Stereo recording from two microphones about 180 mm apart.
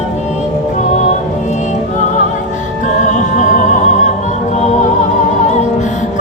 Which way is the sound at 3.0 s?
45° left (ahead or behind).